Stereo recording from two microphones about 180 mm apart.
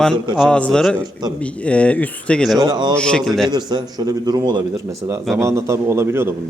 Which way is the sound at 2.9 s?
5° left (ahead or behind).